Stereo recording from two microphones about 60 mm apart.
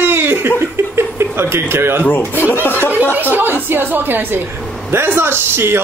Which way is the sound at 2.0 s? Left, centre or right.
Left.